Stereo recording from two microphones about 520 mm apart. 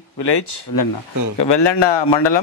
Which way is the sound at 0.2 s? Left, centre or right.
Left.